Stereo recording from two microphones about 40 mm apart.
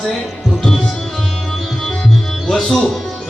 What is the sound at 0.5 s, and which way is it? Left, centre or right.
Music, centre.